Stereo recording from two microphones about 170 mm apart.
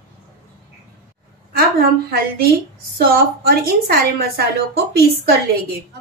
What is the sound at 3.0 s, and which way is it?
A woman's voice, 60° right (ahead or behind).